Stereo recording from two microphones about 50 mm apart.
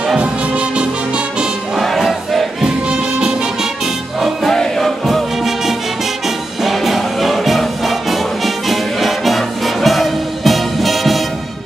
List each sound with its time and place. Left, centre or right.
0.2 s music: right
1.8 s music: centre
2.9 s music: centre
5.0 s music: centre